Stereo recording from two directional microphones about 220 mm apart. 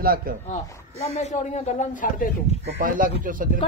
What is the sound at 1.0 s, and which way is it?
Speech, 30° left (ahead or behind).